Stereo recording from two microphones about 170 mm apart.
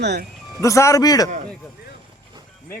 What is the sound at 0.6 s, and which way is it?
Speech, 20° left (ahead or behind).